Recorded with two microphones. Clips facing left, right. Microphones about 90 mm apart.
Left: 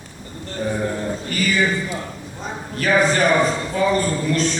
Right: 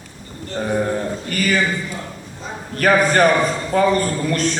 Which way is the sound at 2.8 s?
50° right (ahead or behind).